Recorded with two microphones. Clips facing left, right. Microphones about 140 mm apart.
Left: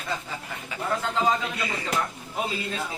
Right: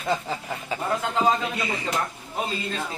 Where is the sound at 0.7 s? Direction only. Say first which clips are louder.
Right 4 dB; 35° right (ahead or behind).